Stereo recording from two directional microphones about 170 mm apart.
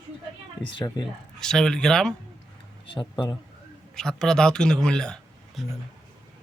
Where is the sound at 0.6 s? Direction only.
25° left (ahead or behind).